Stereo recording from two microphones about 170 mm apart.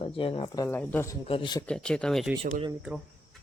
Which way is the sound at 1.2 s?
30° left (ahead or behind).